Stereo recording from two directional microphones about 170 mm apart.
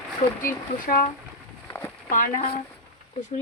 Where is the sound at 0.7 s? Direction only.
50° left (ahead or behind).